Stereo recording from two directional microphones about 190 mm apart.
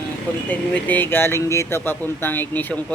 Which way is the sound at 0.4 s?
10° left (ahead or behind).